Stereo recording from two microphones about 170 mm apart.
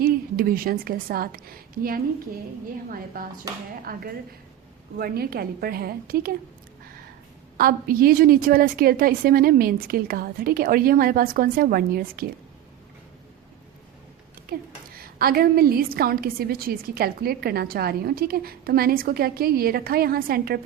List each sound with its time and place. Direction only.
0.0 s a woman's voice: 60° right (ahead or behind)
7.5 s a woman's voice: 60° right (ahead or behind)
14.5 s a woman's voice: 60° right (ahead or behind)